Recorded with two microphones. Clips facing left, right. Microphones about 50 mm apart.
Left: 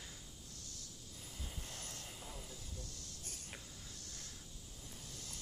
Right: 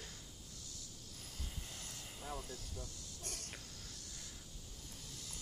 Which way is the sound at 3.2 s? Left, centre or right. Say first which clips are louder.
Right 7 dB; right.